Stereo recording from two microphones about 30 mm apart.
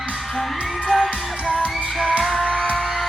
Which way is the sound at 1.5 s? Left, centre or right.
Left.